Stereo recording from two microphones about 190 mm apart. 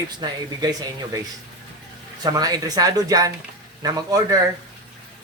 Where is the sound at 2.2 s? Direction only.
20° right (ahead or behind).